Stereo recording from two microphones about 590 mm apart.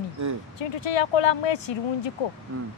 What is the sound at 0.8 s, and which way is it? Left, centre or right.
Speech, left.